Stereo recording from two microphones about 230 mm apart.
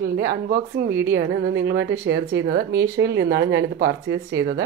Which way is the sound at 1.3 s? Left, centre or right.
Right.